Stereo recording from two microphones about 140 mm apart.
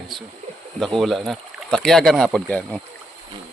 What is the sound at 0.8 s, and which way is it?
Speech, centre (ahead or behind).